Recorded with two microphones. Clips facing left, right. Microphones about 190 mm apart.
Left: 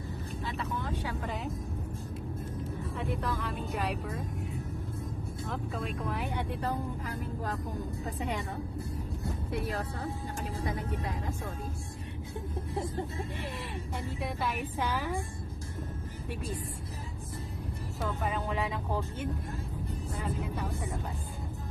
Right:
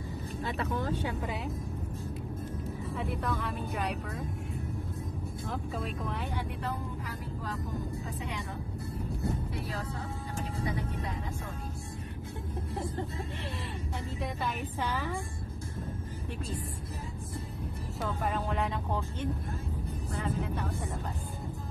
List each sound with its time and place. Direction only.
0.4 s speech: 50° right (ahead or behind)
3.0 s speech: centre (ahead or behind)
5.5 s speech: centre (ahead or behind)
6.6 s speech: 45° left (ahead or behind)
14.2 s a woman's voice: 5° left (ahead or behind)
18.2 s speech: centre (ahead or behind)